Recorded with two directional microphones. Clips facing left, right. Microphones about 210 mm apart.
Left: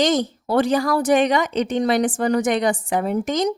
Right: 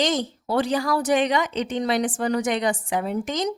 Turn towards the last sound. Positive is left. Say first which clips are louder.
# left 4 dB
turn(degrees=50)  # may be behind; listen again after turning